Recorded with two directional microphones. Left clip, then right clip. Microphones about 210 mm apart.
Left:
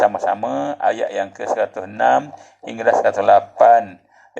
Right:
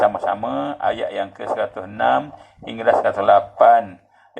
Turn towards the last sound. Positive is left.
turn(degrees=35)  # may be behind; listen again after turning